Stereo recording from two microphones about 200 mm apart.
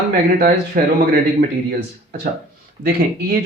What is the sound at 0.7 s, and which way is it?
Speech, 40° right (ahead or behind).